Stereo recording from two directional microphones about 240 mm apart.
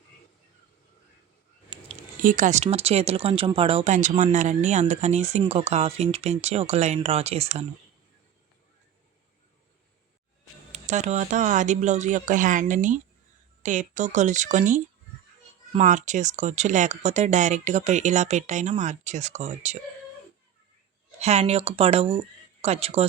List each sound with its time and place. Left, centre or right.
1.7 s a sound: centre
2.2 s speech: right
10.7 s speech: right
21.2 s speech: right